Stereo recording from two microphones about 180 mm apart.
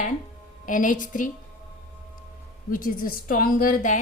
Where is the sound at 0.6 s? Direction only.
45° left (ahead or behind).